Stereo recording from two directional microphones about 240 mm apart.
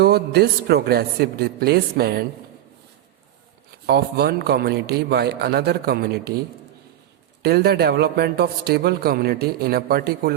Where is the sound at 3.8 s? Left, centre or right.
Right.